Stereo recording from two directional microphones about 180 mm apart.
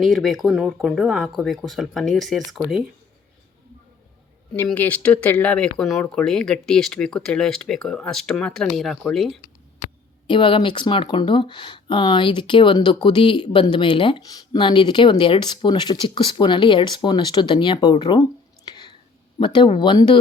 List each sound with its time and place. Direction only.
0.0 s speech: centre (ahead or behind)
4.5 s speech: 10° left (ahead or behind)
10.2 s speech: 25° left (ahead or behind)